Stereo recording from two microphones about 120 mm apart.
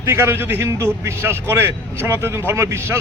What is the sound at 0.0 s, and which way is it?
A man's voice, 20° right (ahead or behind).